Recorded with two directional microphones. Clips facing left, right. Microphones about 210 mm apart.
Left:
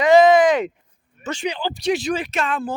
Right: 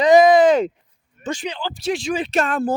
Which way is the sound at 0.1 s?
15° right (ahead or behind).